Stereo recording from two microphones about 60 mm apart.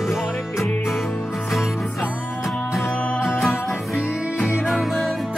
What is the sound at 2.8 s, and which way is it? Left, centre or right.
Music, left.